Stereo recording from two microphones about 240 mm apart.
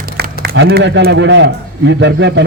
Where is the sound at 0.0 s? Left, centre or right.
Right.